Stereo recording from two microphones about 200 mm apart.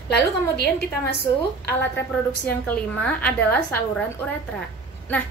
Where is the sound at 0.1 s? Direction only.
55° left (ahead or behind).